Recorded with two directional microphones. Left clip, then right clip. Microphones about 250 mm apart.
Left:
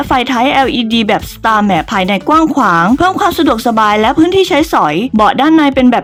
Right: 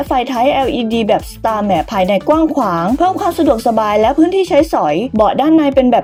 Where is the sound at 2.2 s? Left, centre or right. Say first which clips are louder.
Left 3 dB; left.